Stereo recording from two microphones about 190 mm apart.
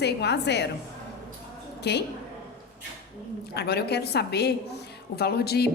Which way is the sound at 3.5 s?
60° left (ahead or behind).